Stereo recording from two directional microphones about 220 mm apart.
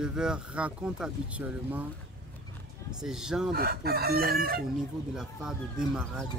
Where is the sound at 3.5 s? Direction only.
45° right (ahead or behind).